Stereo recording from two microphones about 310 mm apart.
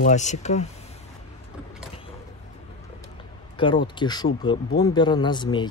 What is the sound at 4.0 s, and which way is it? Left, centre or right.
Speech, centre.